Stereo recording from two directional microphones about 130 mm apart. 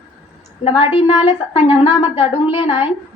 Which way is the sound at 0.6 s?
45° left (ahead or behind).